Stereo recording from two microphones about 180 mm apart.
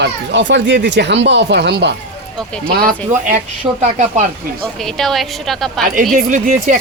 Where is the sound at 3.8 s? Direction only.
40° right (ahead or behind).